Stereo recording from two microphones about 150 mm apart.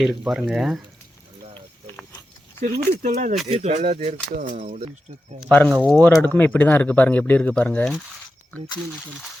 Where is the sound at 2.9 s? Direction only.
55° right (ahead or behind).